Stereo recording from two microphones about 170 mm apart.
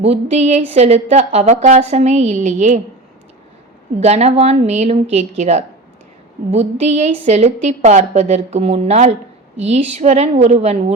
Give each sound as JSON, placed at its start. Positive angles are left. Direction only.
{"t": 0.0, "sound": "a woman's voice", "side_deg": -40}
{"t": 4.0, "sound": "a woman's voice", "side_deg": -40}